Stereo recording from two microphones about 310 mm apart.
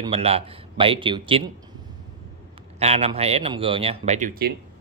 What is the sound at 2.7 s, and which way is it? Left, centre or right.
A man's voice, centre.